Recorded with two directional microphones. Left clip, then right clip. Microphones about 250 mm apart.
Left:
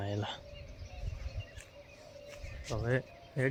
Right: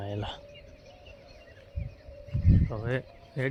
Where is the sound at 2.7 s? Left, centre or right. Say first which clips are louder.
Right 1 dB; centre.